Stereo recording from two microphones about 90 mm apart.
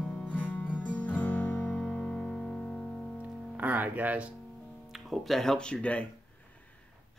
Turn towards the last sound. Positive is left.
turn(degrees=10)  # may be behind; listen again after turning